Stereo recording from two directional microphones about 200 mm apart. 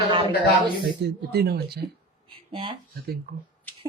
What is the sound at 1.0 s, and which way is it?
Speech, 55° right (ahead or behind).